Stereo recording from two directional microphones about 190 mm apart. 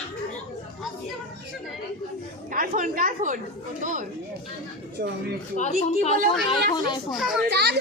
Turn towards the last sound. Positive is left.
turn(degrees=-65)  # may be behind; listen again after turning